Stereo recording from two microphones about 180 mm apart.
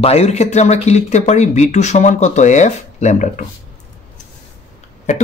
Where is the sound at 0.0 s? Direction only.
35° left (ahead or behind).